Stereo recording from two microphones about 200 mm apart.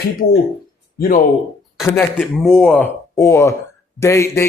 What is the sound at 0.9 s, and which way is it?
Speech, 45° left (ahead or behind).